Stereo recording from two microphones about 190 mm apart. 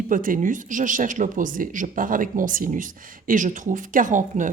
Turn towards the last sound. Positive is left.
turn(degrees=-40)  # may be behind; listen again after turning